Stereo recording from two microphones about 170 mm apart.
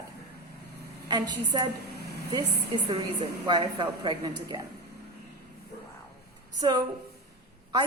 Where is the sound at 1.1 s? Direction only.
25° right (ahead or behind).